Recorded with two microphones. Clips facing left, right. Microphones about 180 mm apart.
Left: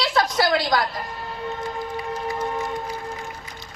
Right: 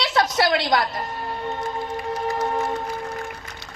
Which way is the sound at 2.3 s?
45° right (ahead or behind).